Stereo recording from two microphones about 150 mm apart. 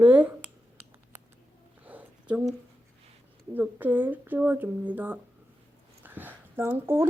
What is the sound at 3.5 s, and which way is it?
A woman's voice, 10° right (ahead or behind).